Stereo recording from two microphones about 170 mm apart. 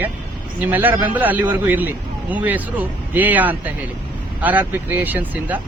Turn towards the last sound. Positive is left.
turn(degrees=-10)  # may be behind; listen again after turning